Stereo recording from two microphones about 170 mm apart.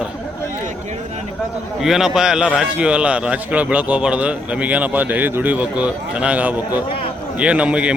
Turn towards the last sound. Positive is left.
turn(degrees=-5)  # may be behind; listen again after turning